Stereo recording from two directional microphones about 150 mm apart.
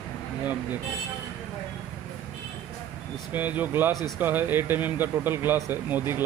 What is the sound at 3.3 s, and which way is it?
Speech, 10° right (ahead or behind).